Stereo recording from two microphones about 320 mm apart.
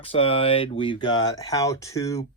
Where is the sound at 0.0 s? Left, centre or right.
Centre.